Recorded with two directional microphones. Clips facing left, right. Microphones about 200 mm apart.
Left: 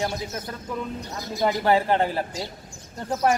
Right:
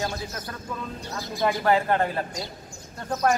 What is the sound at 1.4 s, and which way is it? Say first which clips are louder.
Speech: left 1 dB; 25° left (ahead or behind).